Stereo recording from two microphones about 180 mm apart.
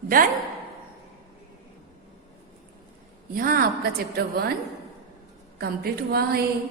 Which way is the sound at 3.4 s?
55° right (ahead or behind).